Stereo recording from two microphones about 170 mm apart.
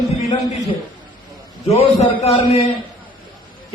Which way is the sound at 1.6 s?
40° left (ahead or behind).